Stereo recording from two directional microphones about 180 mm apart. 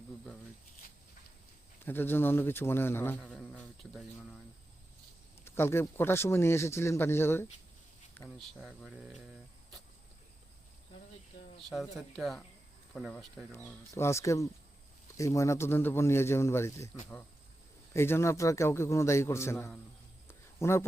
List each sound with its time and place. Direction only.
1.8 s a man's voice: 10° left (ahead or behind)
5.5 s a man's voice: 15° left (ahead or behind)
12.1 s a man's voice: centre (ahead or behind)
17.9 s a man's voice: 15° left (ahead or behind)
20.2 s a sound: 15° left (ahead or behind)